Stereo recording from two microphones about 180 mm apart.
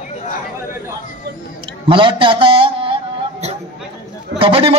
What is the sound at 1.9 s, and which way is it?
A man's voice, 30° right (ahead or behind).